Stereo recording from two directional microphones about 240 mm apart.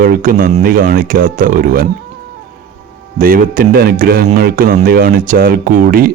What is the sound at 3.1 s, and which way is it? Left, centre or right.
A man's voice, right.